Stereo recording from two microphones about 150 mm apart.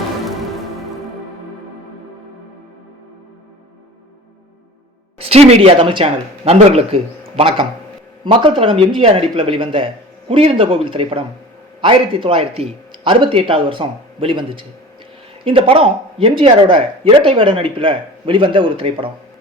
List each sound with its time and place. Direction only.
5.2 s speech: 40° right (ahead or behind)